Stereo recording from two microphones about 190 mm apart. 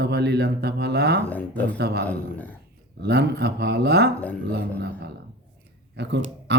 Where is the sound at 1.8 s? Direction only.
60° right (ahead or behind).